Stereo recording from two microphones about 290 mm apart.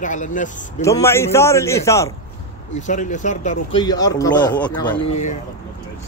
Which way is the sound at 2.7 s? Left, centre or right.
Left.